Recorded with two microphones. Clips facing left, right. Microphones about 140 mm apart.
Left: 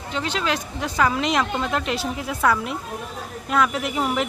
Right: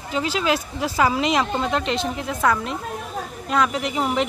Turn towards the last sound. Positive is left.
turn(degrees=0)  # may be behind; listen again after turning